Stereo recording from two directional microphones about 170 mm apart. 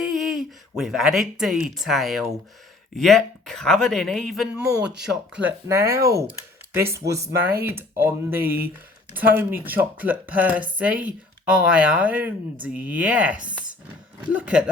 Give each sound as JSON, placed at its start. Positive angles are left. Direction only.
{"t": 0.0, "sound": "speech", "side_deg": 0}